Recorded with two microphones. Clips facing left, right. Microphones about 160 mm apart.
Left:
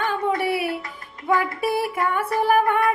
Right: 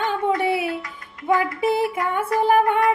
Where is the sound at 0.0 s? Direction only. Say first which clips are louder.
Right 2 dB; 20° right (ahead or behind).